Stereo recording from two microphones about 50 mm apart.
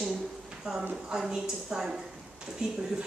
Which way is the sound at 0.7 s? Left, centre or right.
Centre.